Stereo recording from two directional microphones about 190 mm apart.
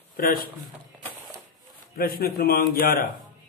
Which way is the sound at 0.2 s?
50° left (ahead or behind).